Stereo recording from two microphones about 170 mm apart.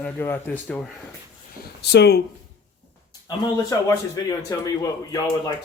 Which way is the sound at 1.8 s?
75° left (ahead or behind).